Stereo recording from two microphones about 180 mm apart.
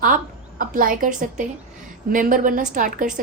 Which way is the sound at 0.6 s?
50° right (ahead or behind).